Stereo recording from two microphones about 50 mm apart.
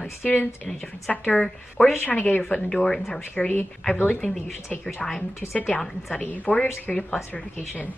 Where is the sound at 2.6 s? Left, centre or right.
Centre.